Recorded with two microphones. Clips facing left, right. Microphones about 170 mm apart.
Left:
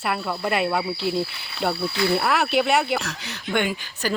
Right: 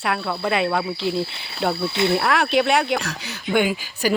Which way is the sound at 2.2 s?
5° left (ahead or behind).